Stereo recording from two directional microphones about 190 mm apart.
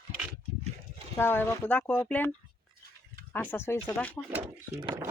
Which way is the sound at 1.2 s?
10° left (ahead or behind).